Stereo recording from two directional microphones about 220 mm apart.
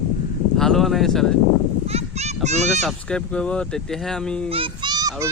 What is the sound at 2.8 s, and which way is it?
Speech, 5° left (ahead or behind).